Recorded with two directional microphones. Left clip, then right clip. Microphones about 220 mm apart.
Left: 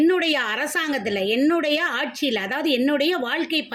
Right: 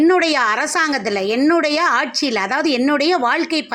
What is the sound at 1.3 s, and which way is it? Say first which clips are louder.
Speech: right 6 dB; 5° left (ahead or behind).